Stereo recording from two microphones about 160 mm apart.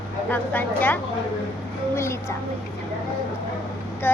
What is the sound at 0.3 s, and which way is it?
Speech, 10° left (ahead or behind).